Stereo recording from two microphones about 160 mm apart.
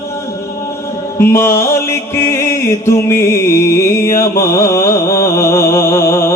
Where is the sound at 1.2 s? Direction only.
15° left (ahead or behind).